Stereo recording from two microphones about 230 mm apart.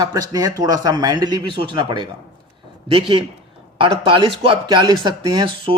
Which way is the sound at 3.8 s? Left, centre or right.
Right.